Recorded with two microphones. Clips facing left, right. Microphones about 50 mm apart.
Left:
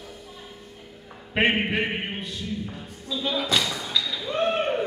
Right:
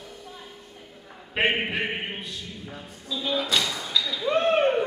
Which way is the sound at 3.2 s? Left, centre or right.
Centre.